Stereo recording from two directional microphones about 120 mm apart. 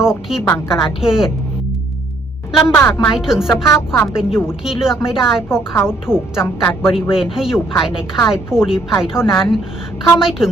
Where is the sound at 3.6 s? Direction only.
25° left (ahead or behind).